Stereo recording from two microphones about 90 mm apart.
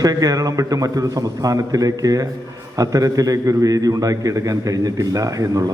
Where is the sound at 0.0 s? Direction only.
40° right (ahead or behind).